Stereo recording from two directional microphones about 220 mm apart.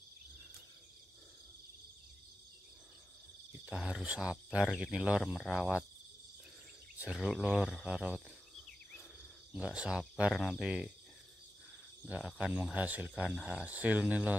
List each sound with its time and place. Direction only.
3.6 s speech: 5° right (ahead or behind)
7.0 s speech: 5° right (ahead or behind)
9.5 s speech: 5° right (ahead or behind)
12.3 s speech: 5° right (ahead or behind)